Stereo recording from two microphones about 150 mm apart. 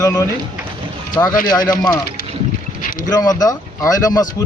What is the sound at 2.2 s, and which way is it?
Boat, 70° left (ahead or behind).